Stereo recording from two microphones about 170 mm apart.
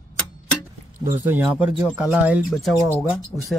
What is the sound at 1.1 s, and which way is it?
Speech, 10° right (ahead or behind).